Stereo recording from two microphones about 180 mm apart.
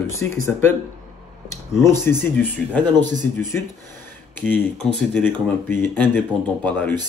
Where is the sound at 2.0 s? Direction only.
15° left (ahead or behind).